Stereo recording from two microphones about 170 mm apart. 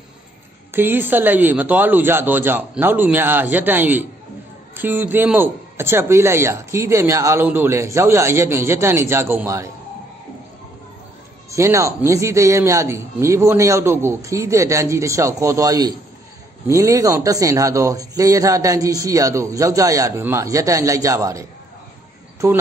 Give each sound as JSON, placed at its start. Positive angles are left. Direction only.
{"t": 0.7, "sound": "speech", "side_deg": -10}
{"t": 11.5, "sound": "speech", "side_deg": -15}